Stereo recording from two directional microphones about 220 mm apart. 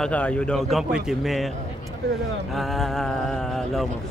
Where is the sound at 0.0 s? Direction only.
5° left (ahead or behind).